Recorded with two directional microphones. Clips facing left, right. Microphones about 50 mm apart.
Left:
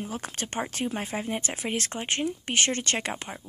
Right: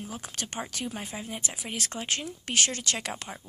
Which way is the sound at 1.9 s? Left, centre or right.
Left.